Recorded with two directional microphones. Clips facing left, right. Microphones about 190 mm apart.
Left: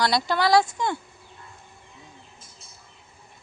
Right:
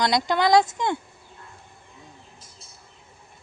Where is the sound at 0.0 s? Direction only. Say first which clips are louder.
Right 1 dB; 20° right (ahead or behind).